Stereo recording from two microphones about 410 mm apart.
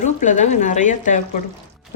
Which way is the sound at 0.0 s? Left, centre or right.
Centre.